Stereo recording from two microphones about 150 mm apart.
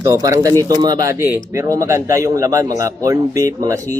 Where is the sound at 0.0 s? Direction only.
20° right (ahead or behind).